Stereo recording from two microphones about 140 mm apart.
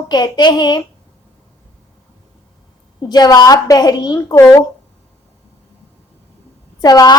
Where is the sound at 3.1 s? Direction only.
30° left (ahead or behind).